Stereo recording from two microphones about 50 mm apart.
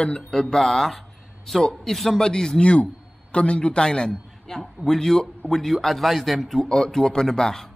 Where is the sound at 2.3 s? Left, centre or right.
Centre.